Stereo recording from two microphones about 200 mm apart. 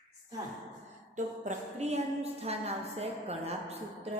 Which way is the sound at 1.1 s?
35° right (ahead or behind).